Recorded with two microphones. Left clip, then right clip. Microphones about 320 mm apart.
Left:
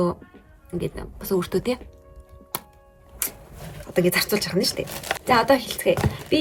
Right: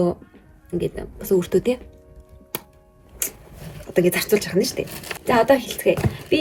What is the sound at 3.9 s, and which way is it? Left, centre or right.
Speech, centre.